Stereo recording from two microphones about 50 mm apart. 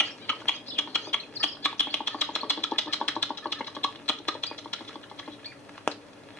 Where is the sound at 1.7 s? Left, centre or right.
Left.